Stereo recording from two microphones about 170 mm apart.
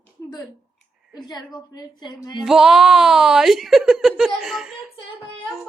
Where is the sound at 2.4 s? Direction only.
Centre (ahead or behind).